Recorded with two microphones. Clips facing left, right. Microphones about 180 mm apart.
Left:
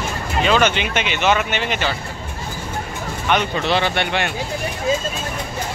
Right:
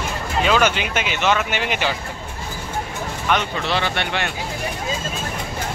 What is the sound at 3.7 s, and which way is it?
Speech, 15° left (ahead or behind).